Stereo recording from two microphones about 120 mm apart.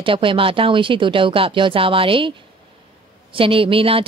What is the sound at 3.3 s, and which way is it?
Speech, 50° right (ahead or behind).